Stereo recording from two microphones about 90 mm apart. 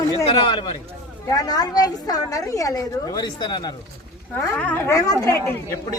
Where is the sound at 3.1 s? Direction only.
50° left (ahead or behind).